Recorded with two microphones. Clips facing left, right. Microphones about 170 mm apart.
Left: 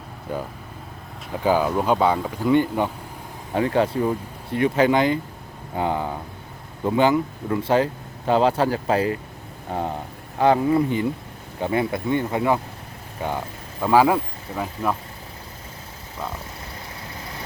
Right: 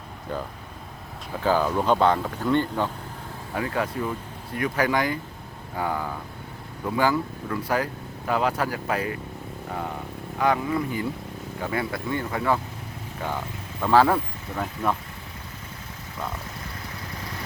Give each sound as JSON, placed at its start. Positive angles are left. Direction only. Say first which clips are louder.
{"t": 1.3, "sound": "speech", "louder": "left 3 dB", "side_deg": 15}
{"t": 3.5, "sound": "speech", "louder": "left 7 dB", "side_deg": 25}
{"t": 10.3, "sound": "speech", "louder": "left 6 dB", "side_deg": 30}
{"t": 13.8, "sound": "speech", "louder": "left 2 dB", "side_deg": 10}